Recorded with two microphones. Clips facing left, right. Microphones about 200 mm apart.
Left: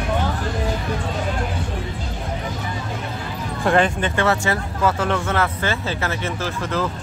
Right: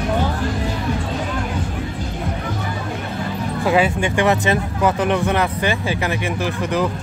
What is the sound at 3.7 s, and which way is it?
Speech, 10° right (ahead or behind).